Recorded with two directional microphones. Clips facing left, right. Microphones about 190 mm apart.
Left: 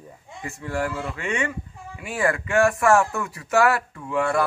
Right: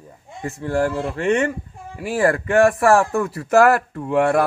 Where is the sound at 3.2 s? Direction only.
50° right (ahead or behind).